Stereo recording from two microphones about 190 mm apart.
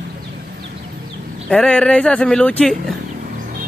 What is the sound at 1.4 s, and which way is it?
Speech, 5° left (ahead or behind).